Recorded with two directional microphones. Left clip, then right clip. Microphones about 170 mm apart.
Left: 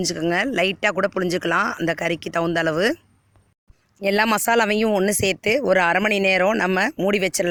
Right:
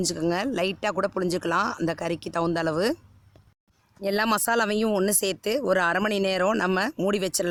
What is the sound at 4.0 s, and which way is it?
Speech, 20° left (ahead or behind).